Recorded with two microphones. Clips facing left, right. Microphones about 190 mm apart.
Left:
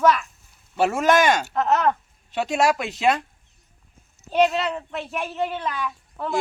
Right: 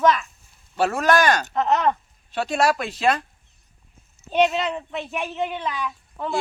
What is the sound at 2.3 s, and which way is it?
Speech, 20° left (ahead or behind).